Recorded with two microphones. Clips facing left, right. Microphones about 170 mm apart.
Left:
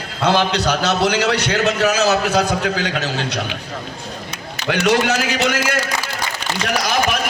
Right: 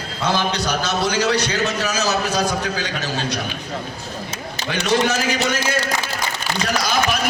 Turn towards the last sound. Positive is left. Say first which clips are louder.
# left 1 dB
turn(degrees=80)